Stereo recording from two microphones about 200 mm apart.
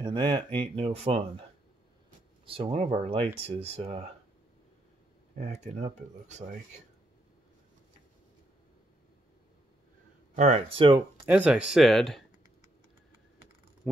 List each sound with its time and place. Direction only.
0.0 s speech: 20° right (ahead or behind)
2.4 s speech: 25° right (ahead or behind)
5.4 s speech: 35° right (ahead or behind)
10.3 s speech: 35° right (ahead or behind)
11.1 s speech: 10° right (ahead or behind)